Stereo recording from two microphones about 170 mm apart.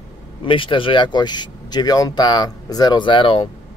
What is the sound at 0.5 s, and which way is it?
Speech, 30° left (ahead or behind).